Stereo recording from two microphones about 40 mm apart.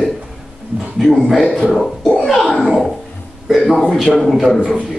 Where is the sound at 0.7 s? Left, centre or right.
Centre.